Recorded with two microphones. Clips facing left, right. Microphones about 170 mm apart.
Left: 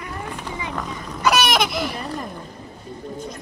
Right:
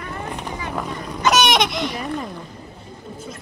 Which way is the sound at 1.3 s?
5° left (ahead or behind).